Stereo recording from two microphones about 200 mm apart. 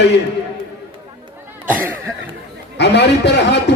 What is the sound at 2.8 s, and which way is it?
Speech, 60° left (ahead or behind).